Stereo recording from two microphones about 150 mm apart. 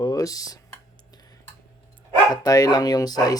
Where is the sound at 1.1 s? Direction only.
25° left (ahead or behind).